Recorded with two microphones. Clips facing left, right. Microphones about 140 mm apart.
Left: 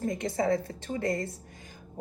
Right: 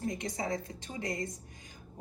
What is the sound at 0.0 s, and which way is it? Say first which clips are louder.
A woman's voice: left 7 dB; 55° left (ahead or behind).